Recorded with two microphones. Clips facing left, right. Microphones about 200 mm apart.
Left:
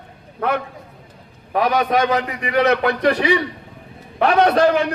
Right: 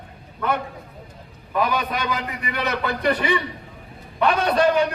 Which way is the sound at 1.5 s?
75° left (ahead or behind).